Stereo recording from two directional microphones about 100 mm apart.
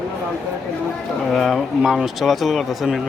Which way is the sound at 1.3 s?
5° left (ahead or behind).